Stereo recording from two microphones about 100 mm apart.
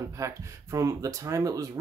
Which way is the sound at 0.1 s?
30° right (ahead or behind).